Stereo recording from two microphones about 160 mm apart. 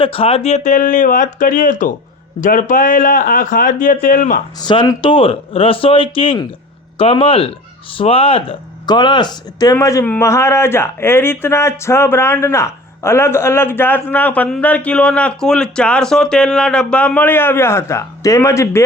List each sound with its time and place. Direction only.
0.0 s speech: 35° left (ahead or behind); by 4.4 s 55° left (ahead or behind)
4.6 s speech: 30° left (ahead or behind)